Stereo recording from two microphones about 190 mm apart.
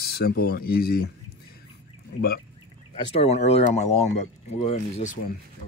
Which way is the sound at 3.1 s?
35° left (ahead or behind).